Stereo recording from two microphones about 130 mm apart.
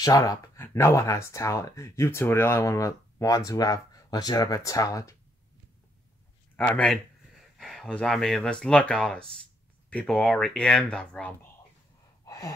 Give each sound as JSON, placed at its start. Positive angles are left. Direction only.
{"t": 0.0, "sound": "speech", "side_deg": 25}
{"t": 6.5, "sound": "speech", "side_deg": 10}
{"t": 12.3, "sound": "gasp", "side_deg": 25}